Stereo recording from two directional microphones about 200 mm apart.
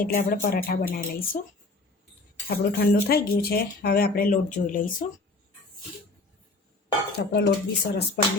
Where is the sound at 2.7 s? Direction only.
50° left (ahead or behind).